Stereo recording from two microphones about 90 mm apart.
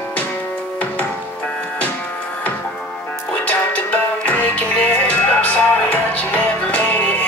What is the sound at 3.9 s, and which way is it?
Music, 15° left (ahead or behind).